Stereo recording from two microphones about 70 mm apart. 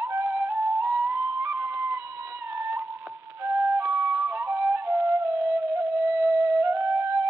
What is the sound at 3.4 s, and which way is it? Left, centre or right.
Flute, right.